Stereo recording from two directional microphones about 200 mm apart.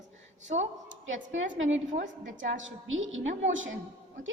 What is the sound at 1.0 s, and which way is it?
A woman's voice, 75° right (ahead or behind).